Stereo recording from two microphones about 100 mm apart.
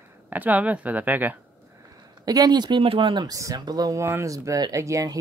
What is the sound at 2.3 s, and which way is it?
Speech, 40° right (ahead or behind).